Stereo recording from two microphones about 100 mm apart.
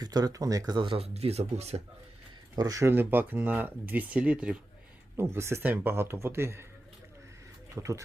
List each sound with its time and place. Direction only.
0.0 s speech: 40° right (ahead or behind)
0.8 s speech: 70° right (ahead or behind); by 1.8 s 90° right
2.6 s speech: 35° right (ahead or behind)
2.9 s speech: 20° right (ahead or behind)
5.1 s speech: 25° right (ahead or behind)
7.8 s speech: 30° right (ahead or behind)